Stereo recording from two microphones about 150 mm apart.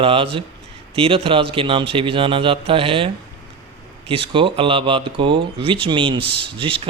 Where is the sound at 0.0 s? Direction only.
35° right (ahead or behind).